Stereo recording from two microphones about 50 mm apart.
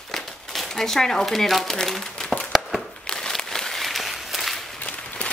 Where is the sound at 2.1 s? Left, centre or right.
Centre.